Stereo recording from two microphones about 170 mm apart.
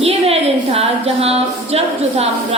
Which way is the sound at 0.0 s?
35° right (ahead or behind).